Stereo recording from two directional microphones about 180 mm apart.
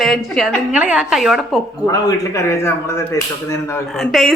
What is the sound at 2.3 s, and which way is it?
Speech, 15° left (ahead or behind).